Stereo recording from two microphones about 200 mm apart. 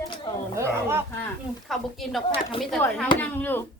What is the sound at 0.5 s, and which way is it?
Speech, 15° right (ahead or behind).